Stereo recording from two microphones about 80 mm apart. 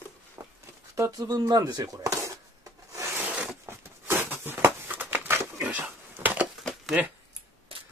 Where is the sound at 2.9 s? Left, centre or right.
Right.